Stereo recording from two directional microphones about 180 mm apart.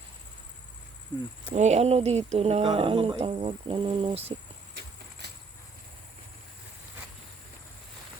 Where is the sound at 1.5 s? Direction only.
40° right (ahead or behind).